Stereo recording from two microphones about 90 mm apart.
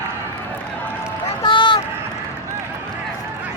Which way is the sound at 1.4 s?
60° left (ahead or behind).